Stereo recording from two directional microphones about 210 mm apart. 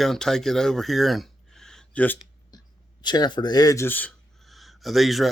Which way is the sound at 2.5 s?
20° left (ahead or behind).